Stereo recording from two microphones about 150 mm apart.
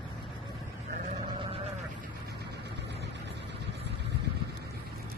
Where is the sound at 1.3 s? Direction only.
35° right (ahead or behind).